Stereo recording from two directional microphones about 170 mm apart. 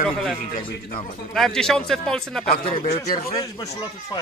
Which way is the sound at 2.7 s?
40° left (ahead or behind).